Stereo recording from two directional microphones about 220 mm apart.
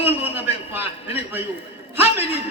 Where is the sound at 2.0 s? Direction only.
30° left (ahead or behind).